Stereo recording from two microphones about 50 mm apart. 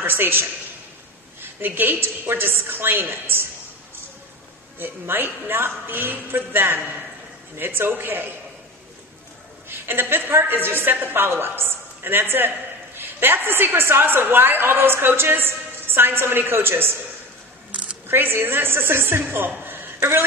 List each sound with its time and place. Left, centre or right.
0.0 s a man's voice: right
4.7 s a woman's voice: right
9.7 s a woman's voice: right
17.6 s camera: right
18.0 s a woman's voice: right
19.6 s a sound: right
20.0 s a woman's voice: right